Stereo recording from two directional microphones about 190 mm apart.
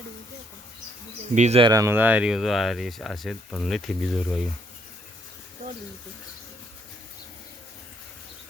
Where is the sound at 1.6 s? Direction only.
15° right (ahead or behind); by 4.4 s centre (ahead or behind).